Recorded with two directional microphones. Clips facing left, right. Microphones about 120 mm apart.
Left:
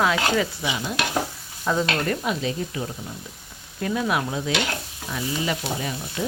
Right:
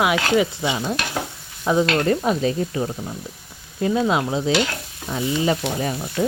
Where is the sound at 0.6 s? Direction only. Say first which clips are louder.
Right 4 dB; 30° right (ahead or behind).